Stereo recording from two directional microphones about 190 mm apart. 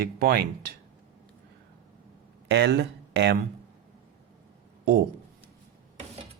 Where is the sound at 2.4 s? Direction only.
60° right (ahead or behind).